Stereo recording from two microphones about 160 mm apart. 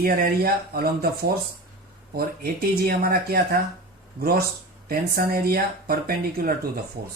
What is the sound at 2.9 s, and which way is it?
Speech, 70° right (ahead or behind).